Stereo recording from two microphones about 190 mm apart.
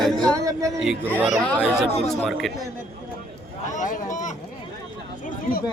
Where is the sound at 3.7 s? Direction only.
40° left (ahead or behind).